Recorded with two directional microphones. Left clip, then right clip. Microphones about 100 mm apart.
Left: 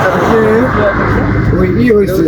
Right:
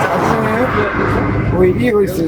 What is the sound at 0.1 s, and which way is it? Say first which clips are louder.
Vehicle: left 5 dB; 30° left (ahead or behind).